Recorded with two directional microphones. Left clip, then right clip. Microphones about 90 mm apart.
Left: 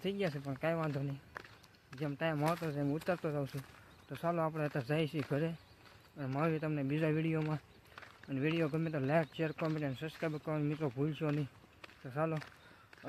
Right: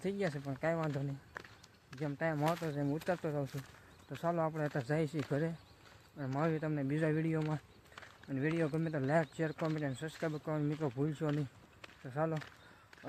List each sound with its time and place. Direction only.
0.0 s speech: 5° left (ahead or behind)
2.1 s speech: 15° left (ahead or behind)
2.4 s speech: centre (ahead or behind)
2.7 s speech: 15° left (ahead or behind)
3.4 s speech: centre (ahead or behind)
4.3 s speech: 15° left (ahead or behind)
4.6 s speech: centre (ahead or behind)
7.3 s walk: centre (ahead or behind)
8.4 s speech: 10° left (ahead or behind)
8.7 s speech: 20° left (ahead or behind)
9.0 s speech: centre (ahead or behind)
12.0 s speech: 10° left (ahead or behind)
12.3 s speech: centre (ahead or behind)